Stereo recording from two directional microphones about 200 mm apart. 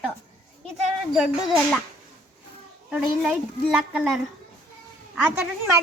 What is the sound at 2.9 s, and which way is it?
A woman's voice, 5° right (ahead or behind).